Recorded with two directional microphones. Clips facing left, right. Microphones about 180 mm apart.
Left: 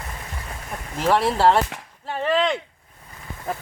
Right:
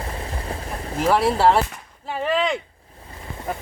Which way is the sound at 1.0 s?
5° right (ahead or behind).